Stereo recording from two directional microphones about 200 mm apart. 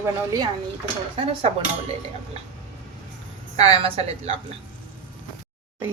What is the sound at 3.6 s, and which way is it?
Speech, 30° right (ahead or behind).